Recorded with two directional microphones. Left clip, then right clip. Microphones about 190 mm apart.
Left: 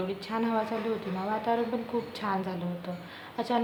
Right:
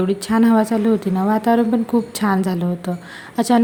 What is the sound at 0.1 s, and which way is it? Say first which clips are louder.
A woman's voice: right 13 dB; 45° right (ahead or behind).